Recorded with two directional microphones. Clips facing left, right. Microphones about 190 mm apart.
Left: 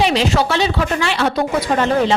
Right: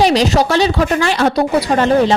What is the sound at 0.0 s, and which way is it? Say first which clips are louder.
Speech: right 4 dB; 40° right (ahead or behind).